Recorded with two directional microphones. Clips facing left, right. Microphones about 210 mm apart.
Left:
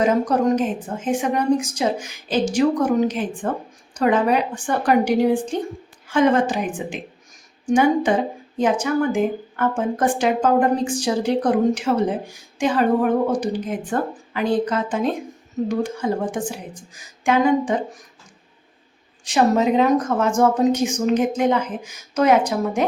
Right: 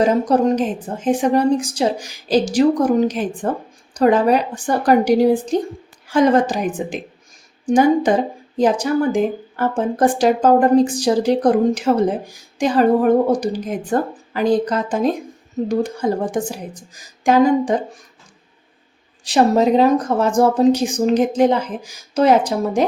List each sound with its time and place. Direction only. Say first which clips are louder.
0.0 s speech: right 3 dB; 30° right (ahead or behind)
19.2 s speech: right 3 dB; 35° right (ahead or behind)